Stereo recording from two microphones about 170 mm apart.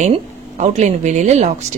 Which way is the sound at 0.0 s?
45° right (ahead or behind).